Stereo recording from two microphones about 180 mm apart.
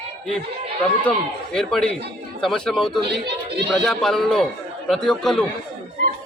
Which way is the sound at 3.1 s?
65° right (ahead or behind).